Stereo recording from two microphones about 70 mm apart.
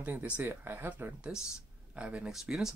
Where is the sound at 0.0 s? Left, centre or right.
Right.